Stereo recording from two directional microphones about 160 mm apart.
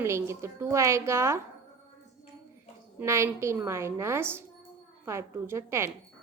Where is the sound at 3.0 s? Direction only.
15° right (ahead or behind).